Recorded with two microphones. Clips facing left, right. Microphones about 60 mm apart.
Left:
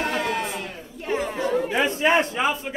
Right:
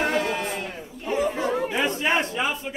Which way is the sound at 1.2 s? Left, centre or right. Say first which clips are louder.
Right 1 dB; centre.